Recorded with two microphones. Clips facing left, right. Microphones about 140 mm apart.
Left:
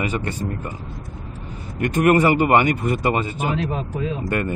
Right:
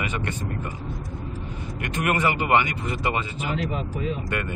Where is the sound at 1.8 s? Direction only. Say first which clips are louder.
Left 9 dB; 40° left (ahead or behind).